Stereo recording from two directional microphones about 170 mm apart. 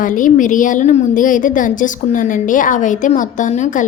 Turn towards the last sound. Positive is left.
turn(degrees=45)  # may be behind; listen again after turning